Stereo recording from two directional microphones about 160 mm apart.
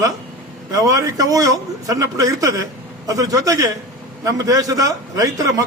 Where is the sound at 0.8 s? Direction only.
20° right (ahead or behind).